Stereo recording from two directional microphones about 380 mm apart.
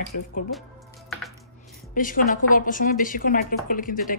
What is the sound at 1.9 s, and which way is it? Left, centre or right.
A woman's voice, left.